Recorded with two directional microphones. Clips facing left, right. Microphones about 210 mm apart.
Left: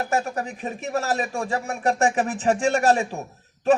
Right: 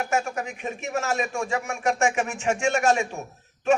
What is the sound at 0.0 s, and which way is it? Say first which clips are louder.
A man's voice: left 1 dB; 35° left (ahead or behind).